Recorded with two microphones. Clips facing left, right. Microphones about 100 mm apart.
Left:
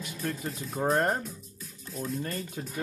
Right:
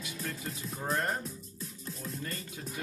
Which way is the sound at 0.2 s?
35° left (ahead or behind).